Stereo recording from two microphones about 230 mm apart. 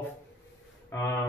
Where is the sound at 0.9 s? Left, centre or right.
Centre.